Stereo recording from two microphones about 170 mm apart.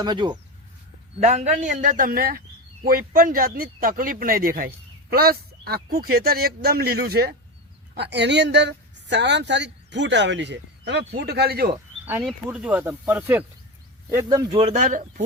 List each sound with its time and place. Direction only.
0.0 s speech: 25° right (ahead or behind)
1.3 s a man's voice: 45° right (ahead or behind); by 7.3 s 65° right (ahead or behind)
7.9 s speech: 80° right
12.2 s speech: 5° right (ahead or behind)
14.5 s a man's voice: 40° right (ahead or behind)